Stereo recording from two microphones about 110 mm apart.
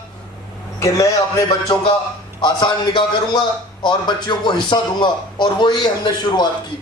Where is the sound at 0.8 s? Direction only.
30° left (ahead or behind).